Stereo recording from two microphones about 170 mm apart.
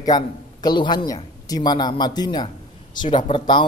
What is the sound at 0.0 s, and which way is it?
Speech, 25° left (ahead or behind).